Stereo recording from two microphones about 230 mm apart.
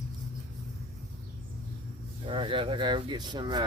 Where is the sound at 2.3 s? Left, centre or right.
Right.